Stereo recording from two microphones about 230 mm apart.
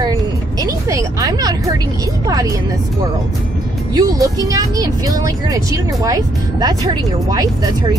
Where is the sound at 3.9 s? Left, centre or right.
Centre.